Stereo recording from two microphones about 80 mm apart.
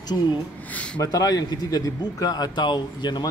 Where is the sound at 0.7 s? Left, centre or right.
Centre.